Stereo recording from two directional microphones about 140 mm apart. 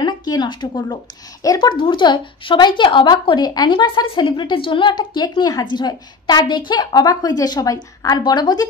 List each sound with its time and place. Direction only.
0.0 s a woman's voice: 30° left (ahead or behind)